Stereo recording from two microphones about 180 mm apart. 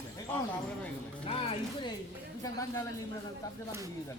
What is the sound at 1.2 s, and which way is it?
Music, 30° left (ahead or behind).